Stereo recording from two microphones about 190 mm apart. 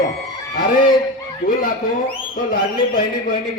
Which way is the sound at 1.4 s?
50° left (ahead or behind).